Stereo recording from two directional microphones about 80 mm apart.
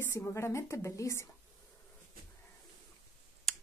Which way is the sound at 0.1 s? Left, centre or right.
Left.